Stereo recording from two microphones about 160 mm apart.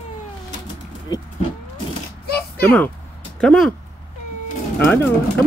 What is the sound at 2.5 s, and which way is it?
Speech, 10° left (ahead or behind).